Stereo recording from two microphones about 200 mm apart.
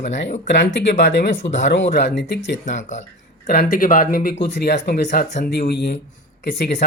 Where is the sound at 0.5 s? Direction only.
60° left (ahead or behind).